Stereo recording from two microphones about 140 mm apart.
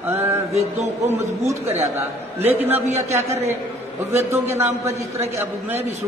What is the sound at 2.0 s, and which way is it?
A man's voice, 15° right (ahead or behind).